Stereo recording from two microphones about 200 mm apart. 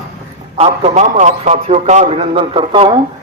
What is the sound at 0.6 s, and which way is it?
A man's voice, 35° right (ahead or behind).